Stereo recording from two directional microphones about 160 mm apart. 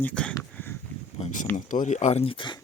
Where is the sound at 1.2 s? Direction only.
55° left (ahead or behind); by 2.6 s 30° left (ahead or behind).